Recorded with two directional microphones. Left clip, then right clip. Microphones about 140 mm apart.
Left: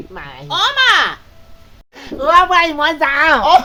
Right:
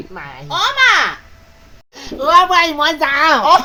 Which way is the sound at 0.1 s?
35° left (ahead or behind).